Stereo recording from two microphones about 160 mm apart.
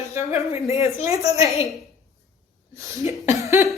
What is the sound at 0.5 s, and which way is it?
Speech, 40° left (ahead or behind).